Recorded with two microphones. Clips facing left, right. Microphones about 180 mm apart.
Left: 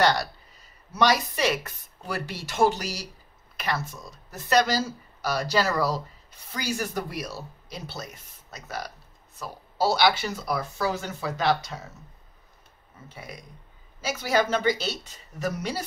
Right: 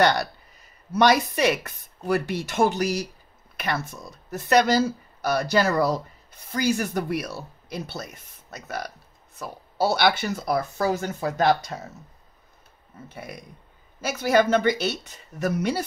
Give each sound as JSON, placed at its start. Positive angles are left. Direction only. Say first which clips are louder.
{"t": 0.0, "sound": "speech", "louder": "right 2 dB", "side_deg": -55}
{"t": 13.1, "sound": "speech", "louder": "right 3 dB", "side_deg": -55}